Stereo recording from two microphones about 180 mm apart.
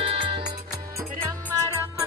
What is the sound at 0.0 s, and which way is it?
Music, 30° right (ahead or behind).